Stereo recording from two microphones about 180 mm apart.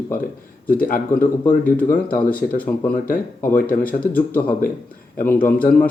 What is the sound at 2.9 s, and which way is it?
Speech, 50° left (ahead or behind).